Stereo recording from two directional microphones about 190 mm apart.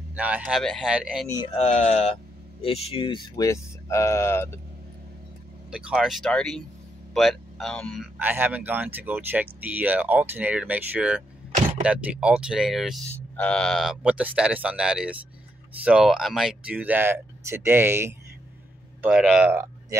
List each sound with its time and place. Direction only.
0.1 s speech: 5° right (ahead or behind)
1.6 s speech: 35° left (ahead or behind); by 4.6 s 15° left (ahead or behind)
5.7 s speech: 5° right (ahead or behind)
8.2 s speech: 10° right (ahead or behind)